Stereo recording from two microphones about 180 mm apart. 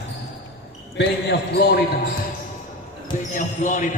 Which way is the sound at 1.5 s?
60° left (ahead or behind).